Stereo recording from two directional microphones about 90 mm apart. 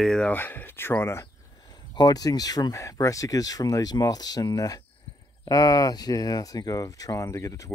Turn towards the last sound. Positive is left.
turn(degrees=35)  # may be behind; listen again after turning